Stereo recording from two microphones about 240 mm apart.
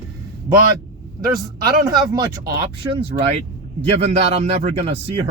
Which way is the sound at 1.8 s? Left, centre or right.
Centre.